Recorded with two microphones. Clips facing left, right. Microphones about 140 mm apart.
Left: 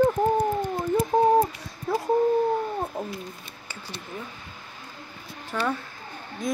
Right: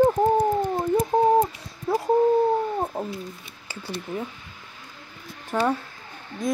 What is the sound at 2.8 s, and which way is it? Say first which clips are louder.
Speech: right 3 dB; 20° right (ahead or behind).